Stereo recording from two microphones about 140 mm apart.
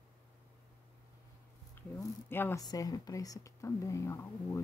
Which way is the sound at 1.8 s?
15° left (ahead or behind).